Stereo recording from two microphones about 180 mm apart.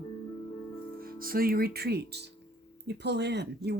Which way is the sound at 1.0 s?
55° right (ahead or behind).